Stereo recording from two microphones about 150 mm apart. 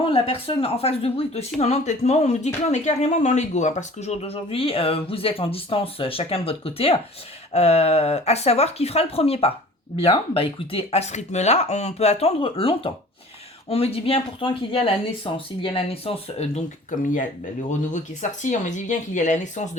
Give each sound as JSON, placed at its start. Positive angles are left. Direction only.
{"t": 0.0, "sound": "a woman's voice", "side_deg": 40}